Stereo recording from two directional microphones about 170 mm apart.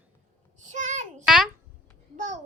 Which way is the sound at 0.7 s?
45° right (ahead or behind).